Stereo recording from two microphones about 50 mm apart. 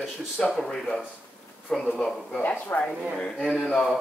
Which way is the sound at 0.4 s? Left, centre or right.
Centre.